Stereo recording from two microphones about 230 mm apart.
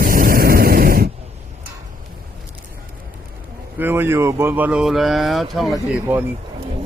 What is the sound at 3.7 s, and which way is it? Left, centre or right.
Speech, centre.